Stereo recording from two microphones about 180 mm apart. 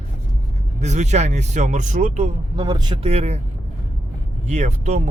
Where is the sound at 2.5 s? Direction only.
25° right (ahead or behind).